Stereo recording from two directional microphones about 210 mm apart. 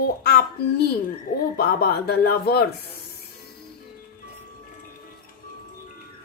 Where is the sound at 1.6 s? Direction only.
45° left (ahead or behind).